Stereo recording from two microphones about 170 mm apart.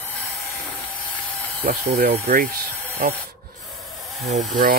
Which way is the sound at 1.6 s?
60° right (ahead or behind).